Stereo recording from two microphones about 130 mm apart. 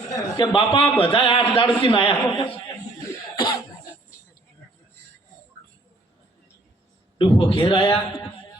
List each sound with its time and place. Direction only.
0.1 s a man's voice: 40° left (ahead or behind)
7.2 s a man's voice: 40° left (ahead or behind)